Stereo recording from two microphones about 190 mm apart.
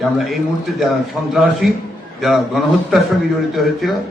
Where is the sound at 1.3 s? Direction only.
Centre (ahead or behind).